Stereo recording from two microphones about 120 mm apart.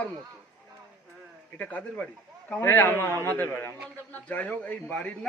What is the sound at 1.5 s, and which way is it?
A man's voice, 10° left (ahead or behind).